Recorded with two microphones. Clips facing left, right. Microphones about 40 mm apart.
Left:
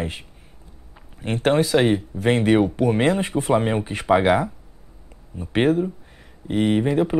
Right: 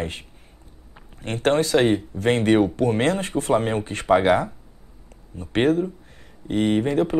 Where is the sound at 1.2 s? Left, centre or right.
Centre.